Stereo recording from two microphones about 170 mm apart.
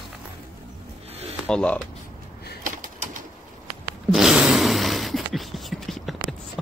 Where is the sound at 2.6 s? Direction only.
50° right (ahead or behind).